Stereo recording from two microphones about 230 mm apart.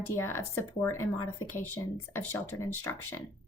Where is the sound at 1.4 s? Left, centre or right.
Left.